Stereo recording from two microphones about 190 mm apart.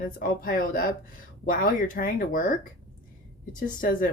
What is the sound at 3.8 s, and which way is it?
Speech, 45° left (ahead or behind).